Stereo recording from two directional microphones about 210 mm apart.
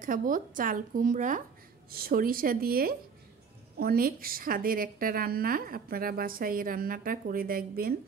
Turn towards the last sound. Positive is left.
turn(degrees=-45)  # may be behind; listen again after turning